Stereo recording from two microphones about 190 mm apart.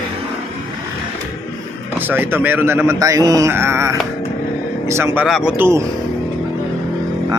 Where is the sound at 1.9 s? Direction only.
10° right (ahead or behind).